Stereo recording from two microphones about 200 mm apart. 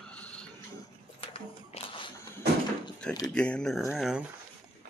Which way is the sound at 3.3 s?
5° left (ahead or behind).